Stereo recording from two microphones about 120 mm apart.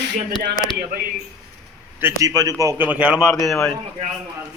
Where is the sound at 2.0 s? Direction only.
20° right (ahead or behind).